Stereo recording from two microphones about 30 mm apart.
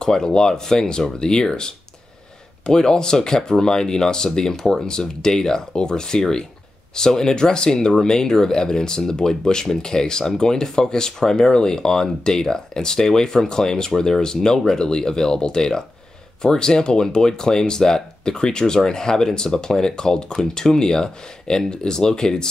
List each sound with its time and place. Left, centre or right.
0.0 s speech: left